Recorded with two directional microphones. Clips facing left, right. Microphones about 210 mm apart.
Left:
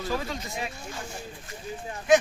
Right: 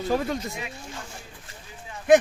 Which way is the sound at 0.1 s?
55° right (ahead or behind).